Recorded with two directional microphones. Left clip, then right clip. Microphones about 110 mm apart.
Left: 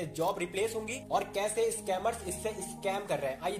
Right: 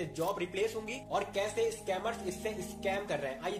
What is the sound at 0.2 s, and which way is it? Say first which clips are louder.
Speech: left 2 dB; 35° left (ahead or behind).